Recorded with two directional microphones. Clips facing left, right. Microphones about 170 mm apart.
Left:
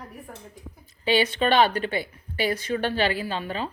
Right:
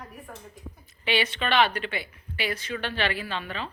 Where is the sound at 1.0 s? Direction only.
40° left (ahead or behind).